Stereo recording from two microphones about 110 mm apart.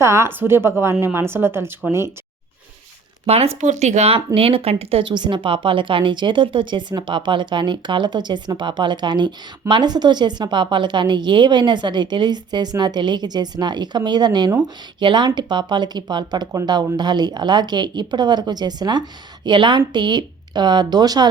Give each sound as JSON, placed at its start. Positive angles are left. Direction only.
{"t": 0.0, "sound": "a woman's voice", "side_deg": -25}
{"t": 3.2, "sound": "speech", "side_deg": -70}
{"t": 3.6, "sound": "speech", "side_deg": -90}
{"t": 4.4, "sound": "speech", "side_deg": -60}
{"t": 5.0, "sound": "a woman's voice", "side_deg": -45}